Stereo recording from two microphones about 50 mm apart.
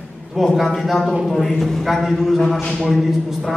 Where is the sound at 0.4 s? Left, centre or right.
Centre.